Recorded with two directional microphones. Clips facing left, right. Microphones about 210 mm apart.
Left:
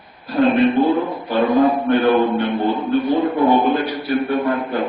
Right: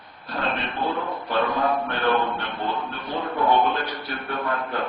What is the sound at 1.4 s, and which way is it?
A man's voice, 20° left (ahead or behind).